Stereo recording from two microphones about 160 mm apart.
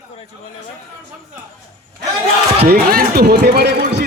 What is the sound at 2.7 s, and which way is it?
Speech, 65° right (ahead or behind).